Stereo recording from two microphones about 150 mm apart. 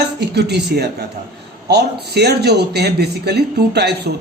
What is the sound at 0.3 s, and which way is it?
Speech, 90° right.